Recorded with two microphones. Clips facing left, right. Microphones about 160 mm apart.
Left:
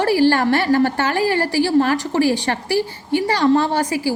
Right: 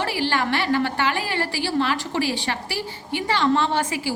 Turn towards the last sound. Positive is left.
turn(degrees=40)  # may be behind; listen again after turning